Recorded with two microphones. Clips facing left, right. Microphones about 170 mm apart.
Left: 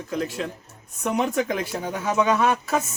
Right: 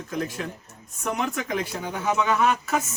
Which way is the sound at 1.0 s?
35° left (ahead or behind).